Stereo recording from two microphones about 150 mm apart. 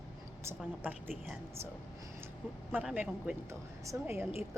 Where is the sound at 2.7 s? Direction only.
10° right (ahead or behind).